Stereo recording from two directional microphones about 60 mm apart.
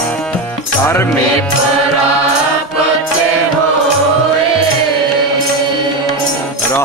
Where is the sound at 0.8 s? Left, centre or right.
Left.